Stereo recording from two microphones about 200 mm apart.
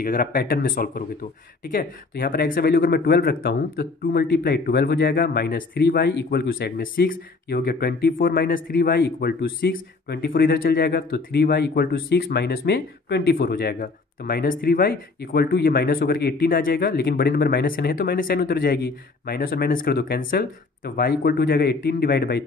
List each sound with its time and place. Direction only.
0.0 s speech: 45° left (ahead or behind)